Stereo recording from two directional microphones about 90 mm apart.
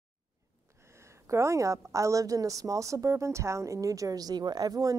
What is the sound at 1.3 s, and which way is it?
A woman's voice, 35° right (ahead or behind).